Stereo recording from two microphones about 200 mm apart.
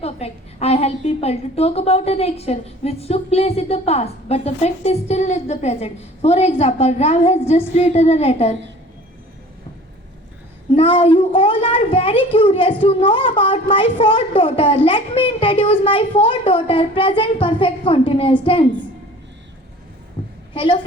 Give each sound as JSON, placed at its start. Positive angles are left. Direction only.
{"t": 0.0, "sound": "a woman's voice", "side_deg": 30}
{"t": 10.7, "sound": "a woman's voice", "side_deg": 25}
{"t": 20.2, "sound": "a sound", "side_deg": 30}
{"t": 20.5, "sound": "a woman's voice", "side_deg": 25}